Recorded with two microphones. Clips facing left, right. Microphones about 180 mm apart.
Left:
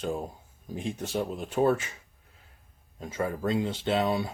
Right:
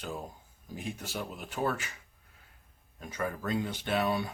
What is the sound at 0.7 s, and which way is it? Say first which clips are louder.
Speech: left 7 dB; 25° left (ahead or behind).